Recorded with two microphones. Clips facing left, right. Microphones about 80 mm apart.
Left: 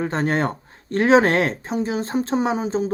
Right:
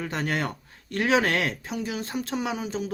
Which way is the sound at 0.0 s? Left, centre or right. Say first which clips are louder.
Left 7 dB; left.